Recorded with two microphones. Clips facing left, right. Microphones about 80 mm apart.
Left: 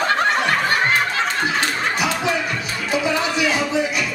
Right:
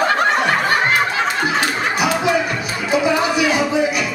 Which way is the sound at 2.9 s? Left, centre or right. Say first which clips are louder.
Right 4 dB; centre.